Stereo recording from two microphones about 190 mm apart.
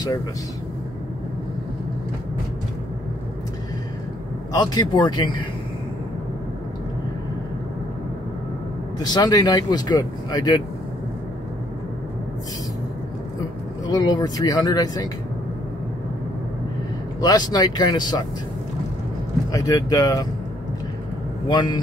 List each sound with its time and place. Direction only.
4.5 s speech: 20° left (ahead or behind)
9.0 s speech: 20° left (ahead or behind)
13.8 s speech: 20° left (ahead or behind)
17.2 s speech: 20° left (ahead or behind)
19.5 s speech: 20° left (ahead or behind)
21.5 s speech: 20° left (ahead or behind)